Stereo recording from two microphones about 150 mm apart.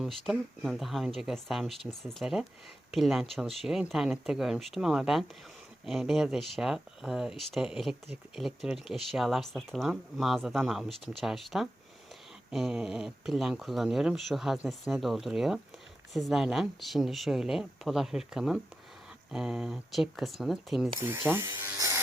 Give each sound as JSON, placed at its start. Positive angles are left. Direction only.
{"t": 0.0, "sound": "speech", "side_deg": 0}
{"t": 21.0, "sound": "speech", "side_deg": -15}